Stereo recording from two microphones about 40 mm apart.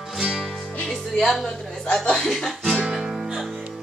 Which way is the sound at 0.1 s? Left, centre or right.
Centre.